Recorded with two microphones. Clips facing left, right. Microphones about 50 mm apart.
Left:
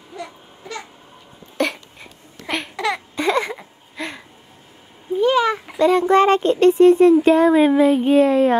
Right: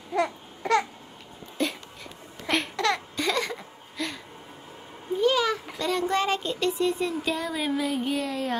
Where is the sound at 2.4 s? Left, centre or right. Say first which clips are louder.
Left 2 dB; centre.